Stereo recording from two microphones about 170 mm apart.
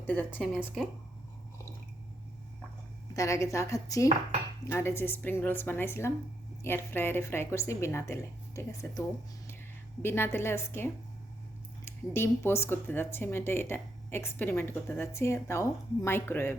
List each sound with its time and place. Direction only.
0.0 s speech: 10° left (ahead or behind)
3.2 s a woman's voice: 20° left (ahead or behind)
11.9 s speech: 15° left (ahead or behind)